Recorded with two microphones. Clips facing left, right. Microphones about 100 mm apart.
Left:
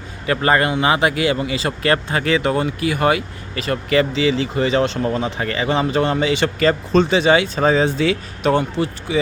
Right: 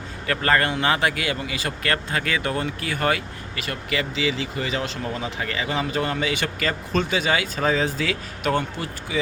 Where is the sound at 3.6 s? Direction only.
35° left (ahead or behind).